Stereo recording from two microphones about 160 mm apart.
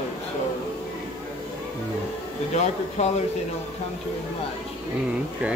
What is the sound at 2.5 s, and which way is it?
Speech, 45° left (ahead or behind).